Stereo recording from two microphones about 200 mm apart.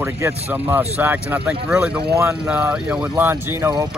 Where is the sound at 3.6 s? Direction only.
20° right (ahead or behind).